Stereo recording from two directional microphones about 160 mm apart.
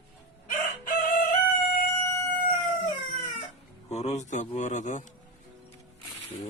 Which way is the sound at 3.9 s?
45° left (ahead or behind).